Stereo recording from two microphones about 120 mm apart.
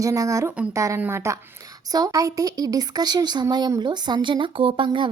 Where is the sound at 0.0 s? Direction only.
25° right (ahead or behind).